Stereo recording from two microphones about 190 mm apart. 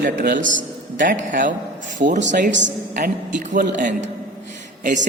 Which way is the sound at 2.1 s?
40° right (ahead or behind).